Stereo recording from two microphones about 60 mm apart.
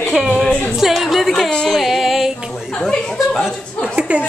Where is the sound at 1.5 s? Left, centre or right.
Centre.